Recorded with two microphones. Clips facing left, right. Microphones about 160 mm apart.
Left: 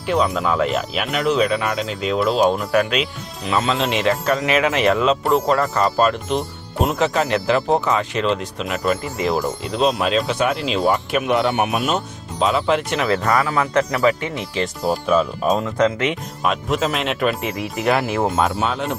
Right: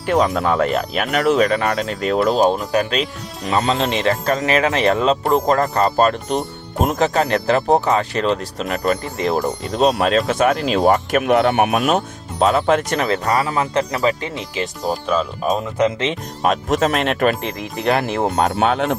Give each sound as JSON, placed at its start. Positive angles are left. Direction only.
{"t": 0.0, "sound": "speech", "side_deg": -50}
{"t": 0.6, "sound": "speech", "side_deg": -50}
{"t": 2.5, "sound": "speech", "side_deg": -30}
{"t": 3.0, "sound": "speech", "side_deg": -40}
{"t": 13.2, "sound": "speech", "side_deg": -30}
{"t": 14.6, "sound": "speech", "side_deg": 5}
{"t": 15.8, "sound": "speech", "side_deg": -25}
{"t": 16.5, "sound": "speech", "side_deg": -40}
{"t": 17.4, "sound": "speech", "side_deg": 5}
{"t": 18.5, "sound": "speech", "side_deg": -60}